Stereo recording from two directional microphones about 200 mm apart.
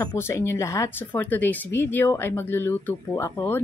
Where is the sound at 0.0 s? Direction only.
10° left (ahead or behind).